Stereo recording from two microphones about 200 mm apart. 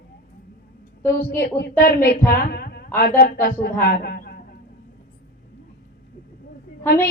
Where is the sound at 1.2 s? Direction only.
50° left (ahead or behind).